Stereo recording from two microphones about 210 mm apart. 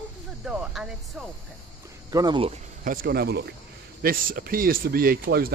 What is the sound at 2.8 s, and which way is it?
Speech, 45° right (ahead or behind).